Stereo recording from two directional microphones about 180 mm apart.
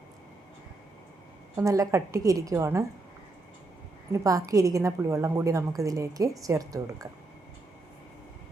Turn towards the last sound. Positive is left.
turn(degrees=-20)  # may be behind; listen again after turning